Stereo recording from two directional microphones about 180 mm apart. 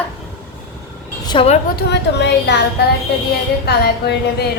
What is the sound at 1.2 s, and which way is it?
Speech, 30° left (ahead or behind).